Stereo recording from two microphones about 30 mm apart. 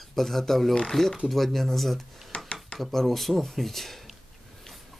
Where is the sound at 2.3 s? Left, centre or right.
Left.